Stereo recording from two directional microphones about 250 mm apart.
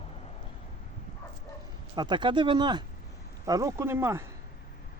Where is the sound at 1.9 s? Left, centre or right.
Centre.